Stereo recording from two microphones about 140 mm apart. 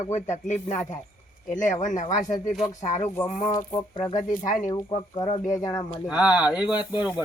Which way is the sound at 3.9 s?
30° left (ahead or behind).